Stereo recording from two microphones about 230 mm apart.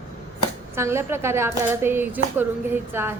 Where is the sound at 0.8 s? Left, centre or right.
Centre.